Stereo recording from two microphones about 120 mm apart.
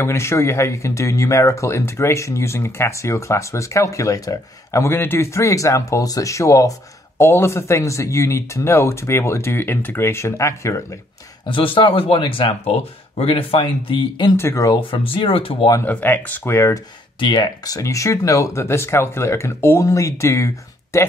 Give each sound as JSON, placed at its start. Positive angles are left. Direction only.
{"t": 0.0, "sound": "speech", "side_deg": 20}
{"t": 11.4, "sound": "speech", "side_deg": 45}
{"t": 14.3, "sound": "speech", "side_deg": 25}
{"t": 14.8, "sound": "speech", "side_deg": 45}
{"t": 15.8, "sound": "speech", "side_deg": 15}
{"t": 17.2, "sound": "speech", "side_deg": 40}